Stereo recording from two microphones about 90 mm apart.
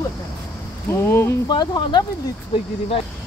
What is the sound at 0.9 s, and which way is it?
Speech, 25° left (ahead or behind).